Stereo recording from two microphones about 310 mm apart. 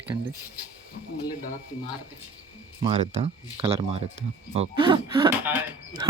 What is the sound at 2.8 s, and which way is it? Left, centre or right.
Speech, centre.